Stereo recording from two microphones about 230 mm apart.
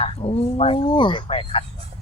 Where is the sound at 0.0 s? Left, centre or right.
Left.